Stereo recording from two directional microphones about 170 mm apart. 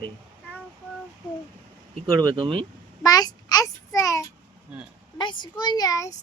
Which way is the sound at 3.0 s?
20° left (ahead or behind).